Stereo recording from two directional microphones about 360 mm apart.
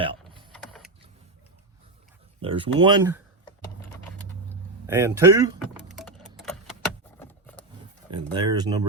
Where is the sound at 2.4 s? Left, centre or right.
Centre.